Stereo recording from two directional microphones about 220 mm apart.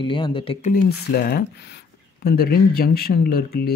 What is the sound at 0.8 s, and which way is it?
Speech, 45° left (ahead or behind).